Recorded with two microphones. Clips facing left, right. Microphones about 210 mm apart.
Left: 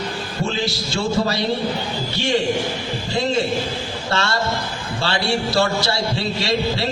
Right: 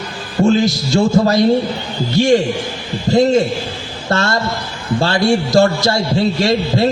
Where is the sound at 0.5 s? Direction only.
45° right (ahead or behind).